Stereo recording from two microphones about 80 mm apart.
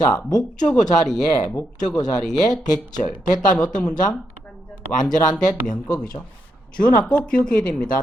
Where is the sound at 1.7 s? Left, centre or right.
Left.